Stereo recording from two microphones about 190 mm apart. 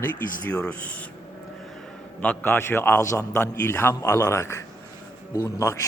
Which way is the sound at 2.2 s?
10° left (ahead or behind).